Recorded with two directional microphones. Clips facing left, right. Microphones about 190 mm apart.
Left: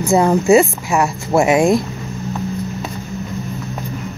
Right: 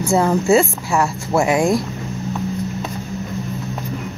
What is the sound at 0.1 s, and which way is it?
Speech, 15° left (ahead or behind).